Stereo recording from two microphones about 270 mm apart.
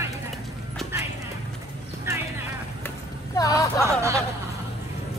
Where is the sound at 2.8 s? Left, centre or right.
Centre.